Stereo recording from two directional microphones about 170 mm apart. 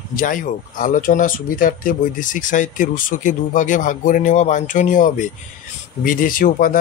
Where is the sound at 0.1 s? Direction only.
55° left (ahead or behind).